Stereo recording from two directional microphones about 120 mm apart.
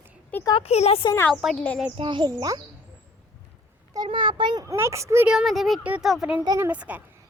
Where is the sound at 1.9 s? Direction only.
45° right (ahead or behind).